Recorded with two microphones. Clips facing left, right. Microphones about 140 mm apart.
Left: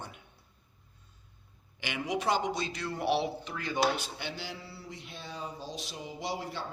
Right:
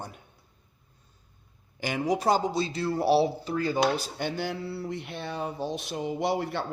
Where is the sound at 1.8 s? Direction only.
40° right (ahead or behind).